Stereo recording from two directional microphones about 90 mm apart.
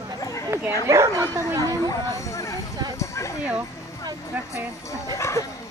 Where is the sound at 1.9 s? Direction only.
35° left (ahead or behind).